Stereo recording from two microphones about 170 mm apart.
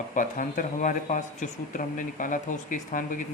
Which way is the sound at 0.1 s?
50° left (ahead or behind).